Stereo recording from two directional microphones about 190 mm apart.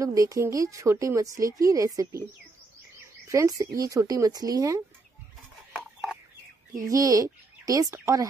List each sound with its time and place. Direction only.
0.0 s a woman's voice: 15° right (ahead or behind)
3.3 s a woman's voice: 15° right (ahead or behind)
6.9 s speech: 20° right (ahead or behind)